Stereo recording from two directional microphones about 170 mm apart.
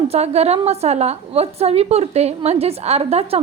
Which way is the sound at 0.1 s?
40° right (ahead or behind).